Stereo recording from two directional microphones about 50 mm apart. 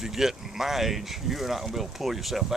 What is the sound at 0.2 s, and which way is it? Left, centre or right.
Speech, centre.